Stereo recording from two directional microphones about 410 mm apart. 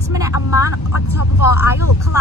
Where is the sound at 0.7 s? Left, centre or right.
Left.